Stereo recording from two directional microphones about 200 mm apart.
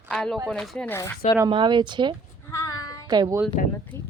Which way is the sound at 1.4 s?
25° right (ahead or behind).